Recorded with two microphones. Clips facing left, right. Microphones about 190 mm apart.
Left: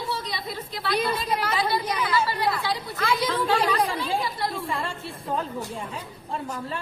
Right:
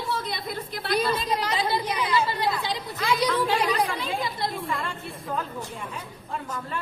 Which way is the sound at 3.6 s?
30° left (ahead or behind).